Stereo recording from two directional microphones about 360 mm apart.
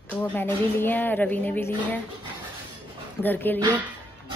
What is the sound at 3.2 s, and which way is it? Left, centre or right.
Speech, centre.